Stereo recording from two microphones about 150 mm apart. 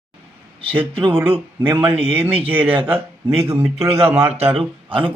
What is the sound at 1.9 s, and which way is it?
Speech, 40° right (ahead or behind).